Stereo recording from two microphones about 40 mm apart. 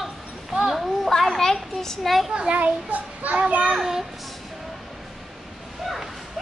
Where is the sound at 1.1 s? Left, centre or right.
Centre.